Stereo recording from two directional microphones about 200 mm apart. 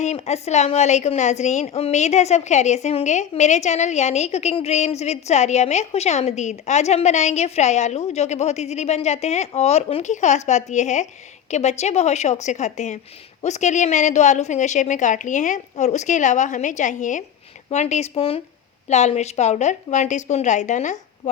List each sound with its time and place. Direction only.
0.0 s a woman's voice: 35° left (ahead or behind)